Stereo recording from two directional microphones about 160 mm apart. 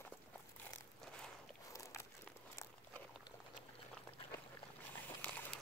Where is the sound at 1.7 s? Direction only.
20° left (ahead or behind).